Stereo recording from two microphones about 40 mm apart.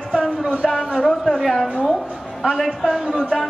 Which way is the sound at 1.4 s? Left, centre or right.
Centre.